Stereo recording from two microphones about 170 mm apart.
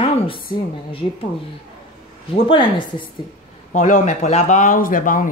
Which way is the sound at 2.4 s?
30° left (ahead or behind).